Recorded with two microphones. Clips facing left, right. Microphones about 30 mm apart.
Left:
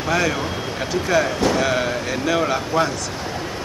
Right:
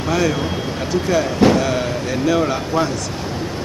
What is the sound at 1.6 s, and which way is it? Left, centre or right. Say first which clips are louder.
Speech: even; centre.